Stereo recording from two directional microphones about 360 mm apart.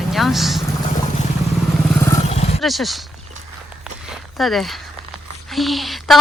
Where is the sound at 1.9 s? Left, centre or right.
Centre.